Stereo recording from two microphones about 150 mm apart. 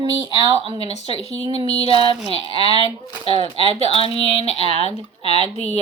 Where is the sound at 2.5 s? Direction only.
40° left (ahead or behind).